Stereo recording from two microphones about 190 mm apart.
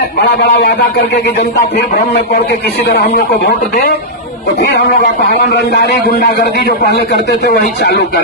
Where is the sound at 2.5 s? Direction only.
55° left (ahead or behind).